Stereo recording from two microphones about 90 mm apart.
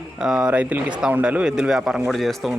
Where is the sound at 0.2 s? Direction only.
5° right (ahead or behind).